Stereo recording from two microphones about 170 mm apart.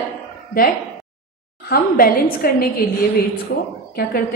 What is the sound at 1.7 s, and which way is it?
A woman's voice, 60° left (ahead or behind).